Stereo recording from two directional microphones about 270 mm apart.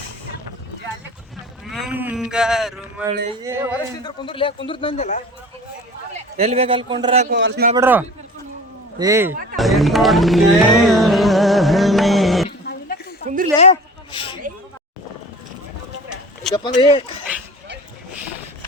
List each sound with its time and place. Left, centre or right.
1.7 s speech: centre
4.0 s a man's voice: centre
6.1 s a man's voice: right
7.3 s speech: right
7.8 s speech: centre
9.6 s speech: centre
13.2 s a sound: right
13.6 s a sound: left
16.0 s a sound: centre
16.6 s speech: centre
17.3 s dog: centre